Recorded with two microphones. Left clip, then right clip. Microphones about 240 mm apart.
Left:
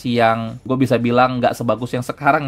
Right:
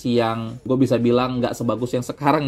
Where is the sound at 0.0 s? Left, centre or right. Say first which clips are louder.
Left 5 dB; left.